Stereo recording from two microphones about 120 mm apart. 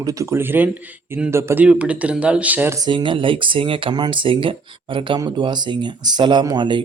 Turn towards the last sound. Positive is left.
turn(degrees=-40)  # may be behind; listen again after turning